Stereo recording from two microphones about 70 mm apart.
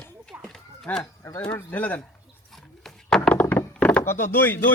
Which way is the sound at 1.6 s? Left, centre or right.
Left.